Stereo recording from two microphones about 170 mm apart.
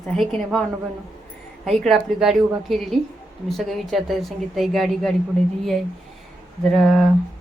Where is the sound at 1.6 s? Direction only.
Centre (ahead or behind).